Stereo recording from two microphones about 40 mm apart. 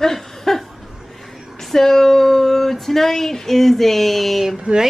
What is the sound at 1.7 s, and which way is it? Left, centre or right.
Speech, centre.